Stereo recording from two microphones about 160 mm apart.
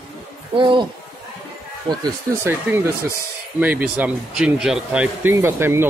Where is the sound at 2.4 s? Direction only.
15° right (ahead or behind).